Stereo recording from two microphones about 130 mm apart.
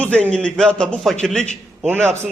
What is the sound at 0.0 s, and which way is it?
A man's voice, 10° left (ahead or behind).